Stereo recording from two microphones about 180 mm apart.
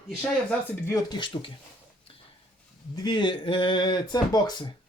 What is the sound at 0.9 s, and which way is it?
Speech, 20° left (ahead or behind).